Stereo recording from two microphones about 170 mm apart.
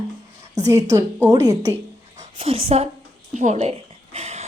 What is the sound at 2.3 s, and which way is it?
A woman's voice, 35° right (ahead or behind).